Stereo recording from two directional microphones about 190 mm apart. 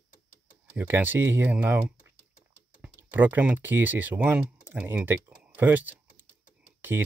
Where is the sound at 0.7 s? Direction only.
10° right (ahead or behind).